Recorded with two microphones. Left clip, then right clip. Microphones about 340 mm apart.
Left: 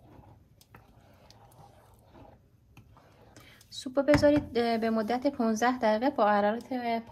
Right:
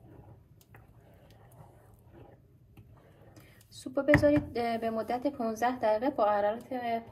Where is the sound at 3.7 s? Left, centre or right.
Left.